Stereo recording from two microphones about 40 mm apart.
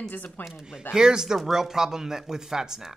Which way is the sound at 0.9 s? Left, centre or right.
Centre.